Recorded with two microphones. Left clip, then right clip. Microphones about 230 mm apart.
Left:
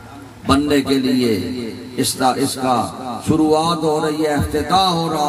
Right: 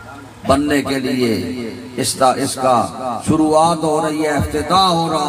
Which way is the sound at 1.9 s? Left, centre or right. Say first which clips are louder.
Right 3 dB; centre.